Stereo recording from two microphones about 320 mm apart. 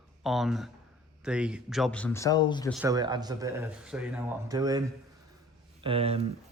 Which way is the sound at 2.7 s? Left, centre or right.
Centre.